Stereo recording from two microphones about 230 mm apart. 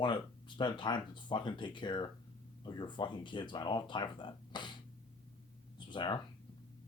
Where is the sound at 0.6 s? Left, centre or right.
Centre.